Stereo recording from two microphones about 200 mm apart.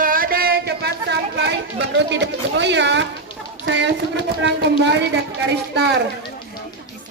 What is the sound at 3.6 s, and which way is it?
A woman's voice, 60° right (ahead or behind).